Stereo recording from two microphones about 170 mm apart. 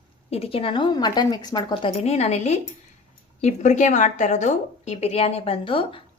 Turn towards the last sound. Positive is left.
turn(degrees=30)  # may be behind; listen again after turning